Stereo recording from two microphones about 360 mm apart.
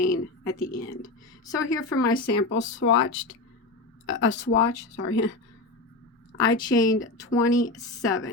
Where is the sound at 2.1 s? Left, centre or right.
Left.